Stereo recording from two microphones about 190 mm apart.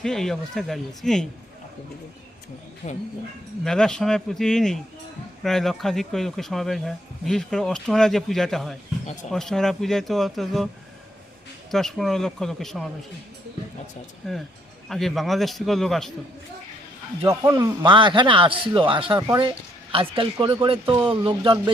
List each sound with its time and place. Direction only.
0.0 s speech: centre (ahead or behind)
2.8 s speech: 45° left (ahead or behind)
3.6 s speech: 5° left (ahead or behind)
11.7 s speech: centre (ahead or behind)
14.2 s speech: centre (ahead or behind)
17.2 s a man's voice: 20° right (ahead or behind)